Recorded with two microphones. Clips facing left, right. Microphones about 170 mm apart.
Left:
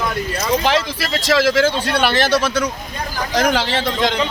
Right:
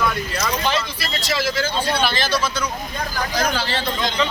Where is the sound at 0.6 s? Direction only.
90° left.